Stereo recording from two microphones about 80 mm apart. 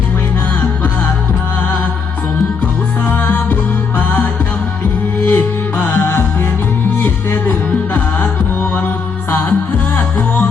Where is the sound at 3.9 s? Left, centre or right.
Left.